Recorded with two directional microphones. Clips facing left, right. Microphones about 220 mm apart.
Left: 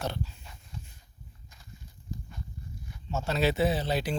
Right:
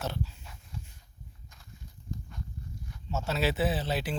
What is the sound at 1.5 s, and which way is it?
Walk, centre (ahead or behind).